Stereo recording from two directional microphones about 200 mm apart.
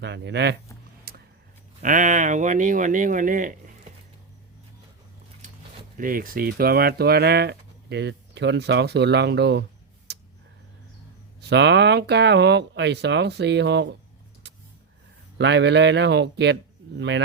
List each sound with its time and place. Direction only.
0.0 s speech: 60° right (ahead or behind)
1.1 s a sound: 50° right (ahead or behind)
1.8 s speech: 40° right (ahead or behind)
6.0 s speech: 45° right (ahead or behind)
10.1 s tick-tock: 55° right (ahead or behind)
11.3 s speech: 60° right (ahead or behind)
15.4 s speech: 60° right (ahead or behind)